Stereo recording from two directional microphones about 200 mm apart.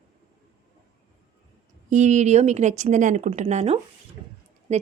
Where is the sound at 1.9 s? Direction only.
35° right (ahead or behind).